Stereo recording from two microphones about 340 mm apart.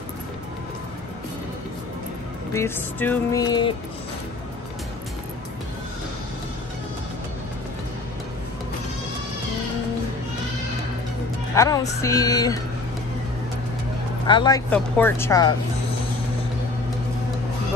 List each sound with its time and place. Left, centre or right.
2.5 s speech: centre
11.5 s speech: centre
14.2 s speech: centre